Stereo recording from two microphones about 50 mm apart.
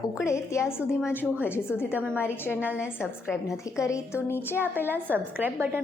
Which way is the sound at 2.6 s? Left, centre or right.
Right.